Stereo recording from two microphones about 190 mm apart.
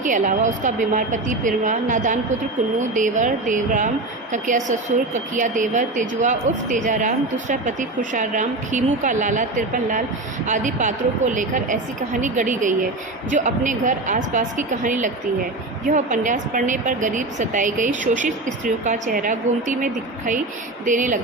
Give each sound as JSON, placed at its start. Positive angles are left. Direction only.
{"t": 0.0, "sound": "a woman's voice", "side_deg": -40}